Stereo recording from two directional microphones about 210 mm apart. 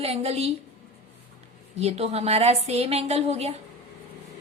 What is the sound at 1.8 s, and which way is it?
A woman's voice, 30° right (ahead or behind).